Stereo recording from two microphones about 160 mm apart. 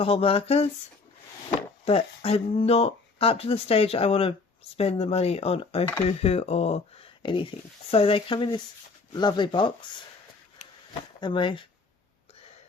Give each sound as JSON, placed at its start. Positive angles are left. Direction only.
{"t": 0.0, "sound": "speech", "side_deg": 35}
{"t": 11.2, "sound": "speech", "side_deg": 30}